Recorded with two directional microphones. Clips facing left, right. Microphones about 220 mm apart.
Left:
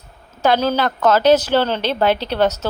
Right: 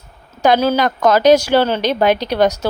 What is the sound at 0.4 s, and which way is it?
Speech, 10° right (ahead or behind).